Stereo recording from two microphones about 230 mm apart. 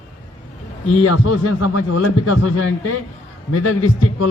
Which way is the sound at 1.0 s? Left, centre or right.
Left.